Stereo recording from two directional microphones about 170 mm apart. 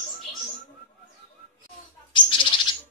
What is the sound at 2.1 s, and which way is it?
Bird, 30° left (ahead or behind).